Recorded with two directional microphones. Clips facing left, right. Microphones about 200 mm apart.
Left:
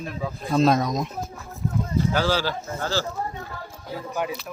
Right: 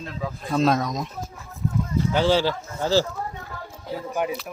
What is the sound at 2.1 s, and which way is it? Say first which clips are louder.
Speech: right 7 dB; 25° right (ahead or behind).